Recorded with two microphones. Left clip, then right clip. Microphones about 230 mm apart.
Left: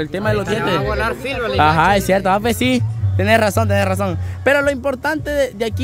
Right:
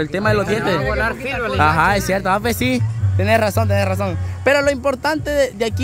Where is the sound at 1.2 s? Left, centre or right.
Centre.